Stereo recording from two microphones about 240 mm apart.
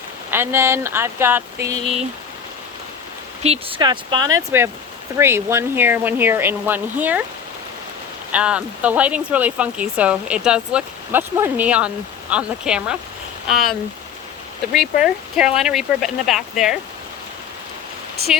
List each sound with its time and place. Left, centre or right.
0.3 s speech: centre
3.4 s speech: right; by 7.2 s centre
8.3 s speech: centre